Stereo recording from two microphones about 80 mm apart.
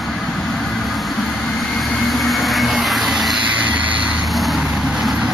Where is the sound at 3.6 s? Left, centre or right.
Centre.